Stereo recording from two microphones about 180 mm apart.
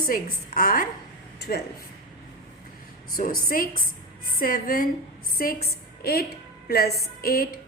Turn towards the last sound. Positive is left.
turn(degrees=55)  # may be behind; listen again after turning